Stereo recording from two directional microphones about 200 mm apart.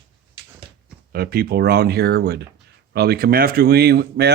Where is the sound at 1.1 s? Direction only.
50° right (ahead or behind).